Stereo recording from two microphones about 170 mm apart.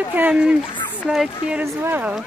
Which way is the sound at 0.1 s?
10° right (ahead or behind).